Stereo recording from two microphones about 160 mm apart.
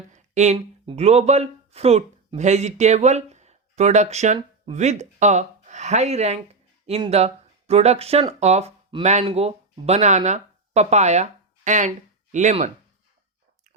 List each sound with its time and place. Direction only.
0.1 s speech: 45° right (ahead or behind)